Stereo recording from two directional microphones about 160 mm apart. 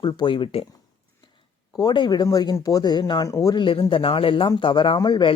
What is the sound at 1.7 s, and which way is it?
Speech, 25° left (ahead or behind).